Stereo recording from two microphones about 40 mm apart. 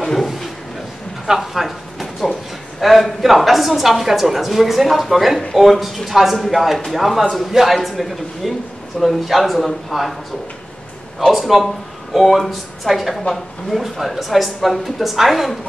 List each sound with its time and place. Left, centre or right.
0.0 s a sound: centre
2.8 s a woman's voice: centre
11.3 s a woman's voice: centre